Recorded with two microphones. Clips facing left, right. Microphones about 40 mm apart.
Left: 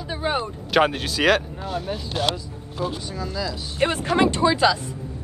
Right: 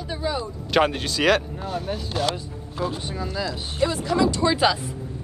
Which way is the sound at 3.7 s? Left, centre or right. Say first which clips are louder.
Left 2 dB; left.